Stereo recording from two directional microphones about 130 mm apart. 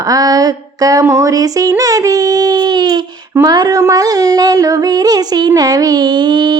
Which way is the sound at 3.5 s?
30° right (ahead or behind).